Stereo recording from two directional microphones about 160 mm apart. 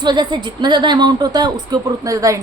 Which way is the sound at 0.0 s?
30° right (ahead or behind).